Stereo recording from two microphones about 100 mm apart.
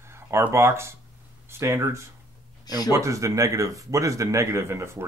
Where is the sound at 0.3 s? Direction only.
25° right (ahead or behind).